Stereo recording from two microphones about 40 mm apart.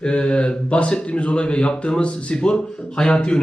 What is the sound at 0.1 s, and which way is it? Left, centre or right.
Speech, left.